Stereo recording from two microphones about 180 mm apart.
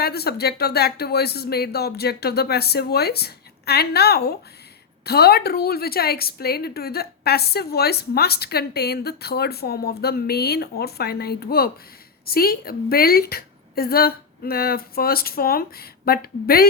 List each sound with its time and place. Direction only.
0.0 s a woman's voice: 60° left (ahead or behind)